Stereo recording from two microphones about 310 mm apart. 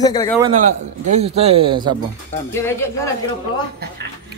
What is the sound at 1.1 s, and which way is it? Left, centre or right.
Speech, centre.